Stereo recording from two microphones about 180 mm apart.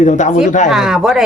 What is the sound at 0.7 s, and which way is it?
Speech, 5° right (ahead or behind).